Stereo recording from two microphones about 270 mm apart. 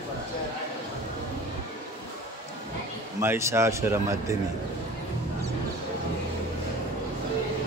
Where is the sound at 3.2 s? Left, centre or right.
Centre.